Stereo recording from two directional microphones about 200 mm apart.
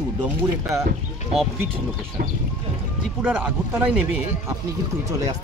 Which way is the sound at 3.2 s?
10° right (ahead or behind).